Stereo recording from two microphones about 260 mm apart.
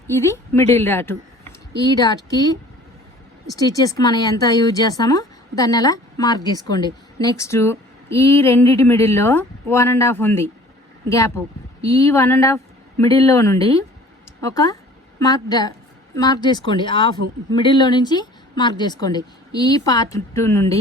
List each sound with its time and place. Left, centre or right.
0.1 s speech: centre
11.8 s speech: centre